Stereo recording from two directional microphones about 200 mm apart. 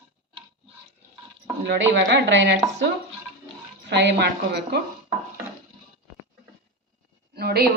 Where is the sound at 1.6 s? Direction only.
60° right (ahead or behind).